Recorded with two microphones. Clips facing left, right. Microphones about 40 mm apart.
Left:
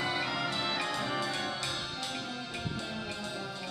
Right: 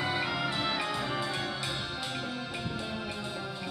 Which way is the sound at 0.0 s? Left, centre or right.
Centre.